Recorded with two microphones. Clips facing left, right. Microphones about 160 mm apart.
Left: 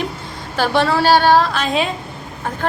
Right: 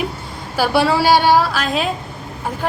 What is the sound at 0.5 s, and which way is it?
A woman's voice, 10° right (ahead or behind).